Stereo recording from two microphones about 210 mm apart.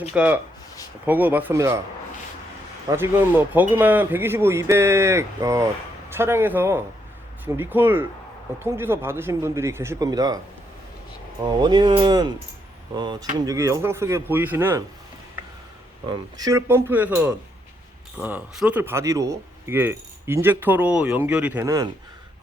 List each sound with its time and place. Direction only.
0.1 s speech: 5° right (ahead or behind)
2.9 s speech: 10° right (ahead or behind)
11.4 s speech: 20° right (ahead or behind)
16.0 s speech: 20° right (ahead or behind)